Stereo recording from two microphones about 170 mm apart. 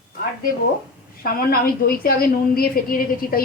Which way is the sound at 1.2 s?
60° left (ahead or behind).